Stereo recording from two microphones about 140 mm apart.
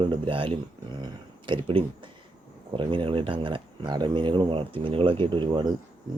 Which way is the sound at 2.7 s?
35° right (ahead or behind).